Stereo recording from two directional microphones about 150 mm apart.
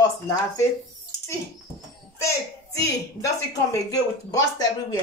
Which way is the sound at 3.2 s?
25° left (ahead or behind).